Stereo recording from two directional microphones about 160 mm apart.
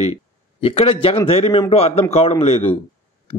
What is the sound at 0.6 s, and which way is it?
Speech, 35° left (ahead or behind).